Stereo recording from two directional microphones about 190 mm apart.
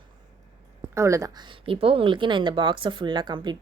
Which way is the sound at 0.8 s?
15° right (ahead or behind).